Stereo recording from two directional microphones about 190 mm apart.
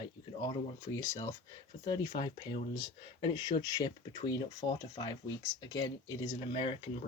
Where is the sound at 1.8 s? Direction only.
25° left (ahead or behind).